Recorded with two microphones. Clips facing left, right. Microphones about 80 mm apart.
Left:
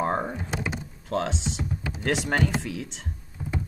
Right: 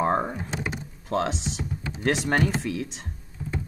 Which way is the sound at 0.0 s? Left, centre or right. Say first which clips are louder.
Right 2 dB; centre.